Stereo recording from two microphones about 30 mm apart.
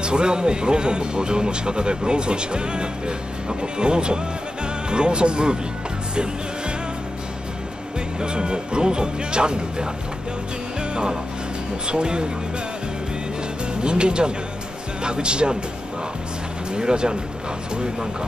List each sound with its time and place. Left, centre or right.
0.0 s speech: right
8.2 s speech: right
10.8 s music: right
11.8 s speech: right
13.8 s speech: right
16.7 s speech: right